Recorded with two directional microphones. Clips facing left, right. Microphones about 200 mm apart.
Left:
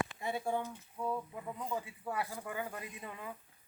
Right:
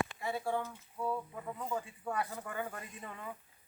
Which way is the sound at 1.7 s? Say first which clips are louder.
Right 2 dB; 10° left (ahead or behind).